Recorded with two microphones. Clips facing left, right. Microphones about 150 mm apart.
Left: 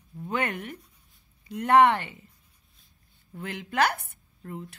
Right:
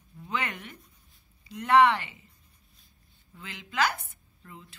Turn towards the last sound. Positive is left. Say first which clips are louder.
# left 10 dB
turn(degrees=55)  # may be behind; listen again after turning